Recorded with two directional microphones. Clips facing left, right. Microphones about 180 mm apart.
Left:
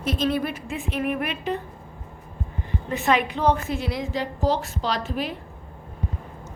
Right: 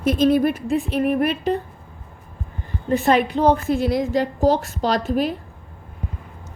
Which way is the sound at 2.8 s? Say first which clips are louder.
Right 5 dB; 35° right (ahead or behind).